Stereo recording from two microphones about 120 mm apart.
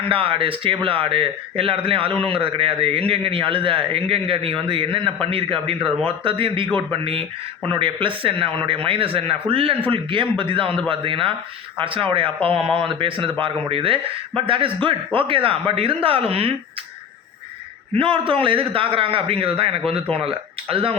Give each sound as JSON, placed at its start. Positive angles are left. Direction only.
{"t": 0.1, "sound": "speech", "side_deg": -50}
{"t": 17.9, "sound": "speech", "side_deg": -45}